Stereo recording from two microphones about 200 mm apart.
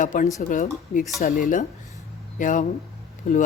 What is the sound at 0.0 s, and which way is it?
Speech, 40° left (ahead or behind).